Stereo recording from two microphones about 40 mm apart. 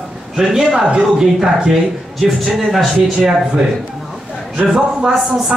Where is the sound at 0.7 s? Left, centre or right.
Right.